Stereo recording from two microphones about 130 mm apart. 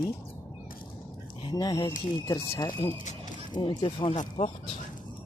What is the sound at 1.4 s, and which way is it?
Speech, 35° left (ahead or behind).